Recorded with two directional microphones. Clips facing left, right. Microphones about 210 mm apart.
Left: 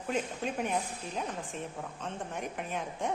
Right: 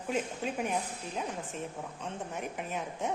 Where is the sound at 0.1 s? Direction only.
5° right (ahead or behind).